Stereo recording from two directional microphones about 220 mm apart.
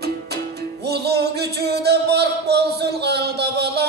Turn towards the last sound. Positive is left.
turn(degrees=-50)  # may be behind; listen again after turning